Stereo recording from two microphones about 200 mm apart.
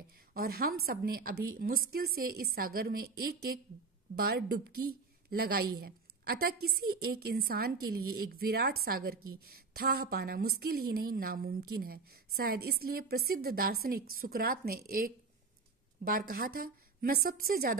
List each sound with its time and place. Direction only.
0.3 s a woman's voice: 50° right (ahead or behind)